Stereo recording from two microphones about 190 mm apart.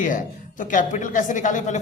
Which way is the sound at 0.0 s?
45° left (ahead or behind).